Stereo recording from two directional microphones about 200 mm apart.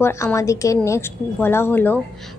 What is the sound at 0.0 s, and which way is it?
A woman's voice, 15° left (ahead or behind).